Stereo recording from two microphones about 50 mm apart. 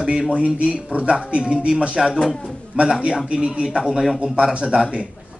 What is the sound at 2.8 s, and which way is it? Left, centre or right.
A man's voice, centre.